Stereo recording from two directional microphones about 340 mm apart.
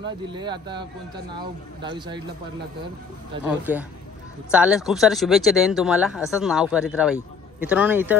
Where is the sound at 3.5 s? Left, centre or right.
Centre.